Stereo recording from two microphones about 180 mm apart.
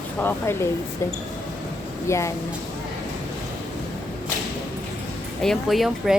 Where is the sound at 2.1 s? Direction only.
15° left (ahead or behind).